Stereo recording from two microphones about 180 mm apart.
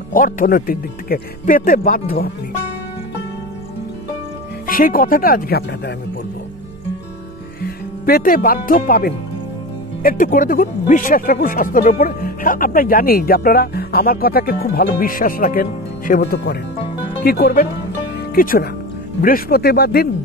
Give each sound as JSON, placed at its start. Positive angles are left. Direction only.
{"t": 0.1, "sound": "speech", "side_deg": 50}
{"t": 4.6, "sound": "speech", "side_deg": 50}
{"t": 7.6, "sound": "music", "side_deg": 55}
{"t": 8.5, "sound": "speech", "side_deg": 50}